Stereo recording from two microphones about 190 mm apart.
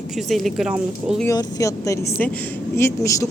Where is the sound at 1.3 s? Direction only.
15° left (ahead or behind).